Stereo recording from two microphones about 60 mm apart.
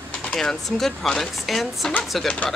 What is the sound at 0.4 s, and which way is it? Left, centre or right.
Speech, centre.